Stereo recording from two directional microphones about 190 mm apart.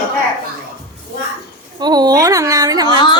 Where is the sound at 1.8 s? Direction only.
20° right (ahead or behind).